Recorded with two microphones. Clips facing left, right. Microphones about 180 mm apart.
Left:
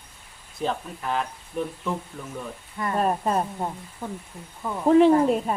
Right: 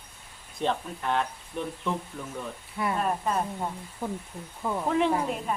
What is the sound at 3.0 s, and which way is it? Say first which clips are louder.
Speech: left 6 dB; 35° left (ahead or behind).